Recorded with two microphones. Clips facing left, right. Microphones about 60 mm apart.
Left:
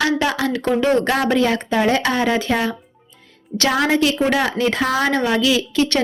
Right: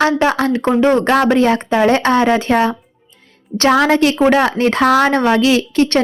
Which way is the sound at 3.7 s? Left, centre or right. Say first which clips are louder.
Right 5 dB; right.